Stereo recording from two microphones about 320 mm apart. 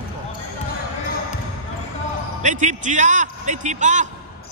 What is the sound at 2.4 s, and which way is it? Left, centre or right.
A man's voice, right.